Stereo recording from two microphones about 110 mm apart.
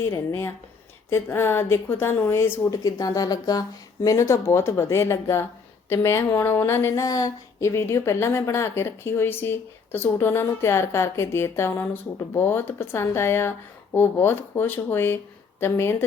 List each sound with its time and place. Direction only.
0.0 s speech: 25° left (ahead or behind)